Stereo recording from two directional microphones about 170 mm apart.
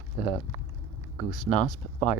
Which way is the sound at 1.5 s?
45° left (ahead or behind).